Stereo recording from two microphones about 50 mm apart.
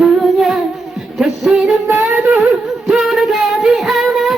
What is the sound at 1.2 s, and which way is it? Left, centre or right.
Music, centre.